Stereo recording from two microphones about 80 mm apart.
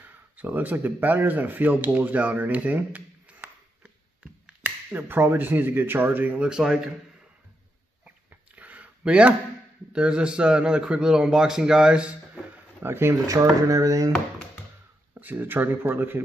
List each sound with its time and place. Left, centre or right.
0.0 s speech: right
3.8 s a sound: centre
4.9 s speech: right; by 6.9 s centre
8.0 s a sound: centre
9.9 s a man's voice: centre
12.8 s speech: right
13.3 s speech: right
15.1 s speech: right